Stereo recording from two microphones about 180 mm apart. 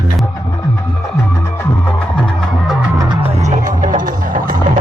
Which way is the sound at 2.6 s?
Centre (ahead or behind).